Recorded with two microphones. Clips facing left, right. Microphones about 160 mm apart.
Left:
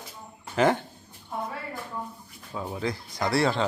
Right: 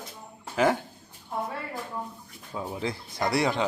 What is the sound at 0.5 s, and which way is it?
Speech, 5° right (ahead or behind).